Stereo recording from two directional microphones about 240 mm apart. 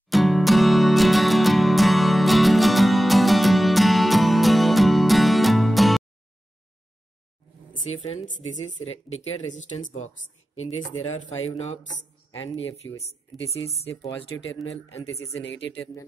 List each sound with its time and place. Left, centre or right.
0.1 s music: centre
8.0 s a woman's voice: left
9.7 s speech: left
10.8 s speech: centre
12.8 s speech: centre
14.3 s speech: left
15.8 s speech: centre